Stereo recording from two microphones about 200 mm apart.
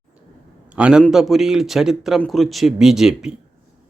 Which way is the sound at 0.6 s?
5° right (ahead or behind).